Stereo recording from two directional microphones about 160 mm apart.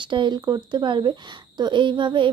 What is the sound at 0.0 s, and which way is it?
A child's voice, 30° right (ahead or behind).